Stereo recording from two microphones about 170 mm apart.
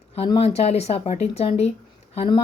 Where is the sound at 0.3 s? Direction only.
40° left (ahead or behind).